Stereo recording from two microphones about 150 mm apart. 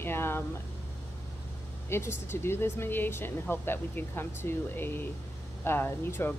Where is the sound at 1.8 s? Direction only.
15° left (ahead or behind).